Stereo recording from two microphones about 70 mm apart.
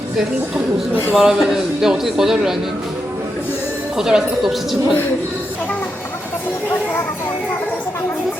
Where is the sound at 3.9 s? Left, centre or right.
Centre.